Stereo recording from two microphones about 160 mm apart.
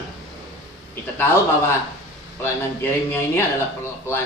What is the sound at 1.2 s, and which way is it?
Speech, 15° left (ahead or behind).